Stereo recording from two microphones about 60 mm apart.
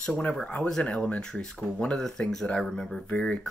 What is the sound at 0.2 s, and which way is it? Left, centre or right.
Speech, centre.